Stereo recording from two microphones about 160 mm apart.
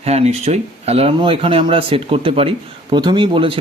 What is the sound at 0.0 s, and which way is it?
Speech, 40° right (ahead or behind).